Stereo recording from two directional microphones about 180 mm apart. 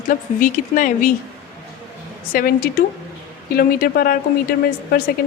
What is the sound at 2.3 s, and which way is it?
A woman's voice, 55° left (ahead or behind).